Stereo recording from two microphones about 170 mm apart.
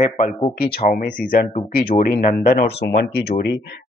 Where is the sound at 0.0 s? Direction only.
45° left (ahead or behind).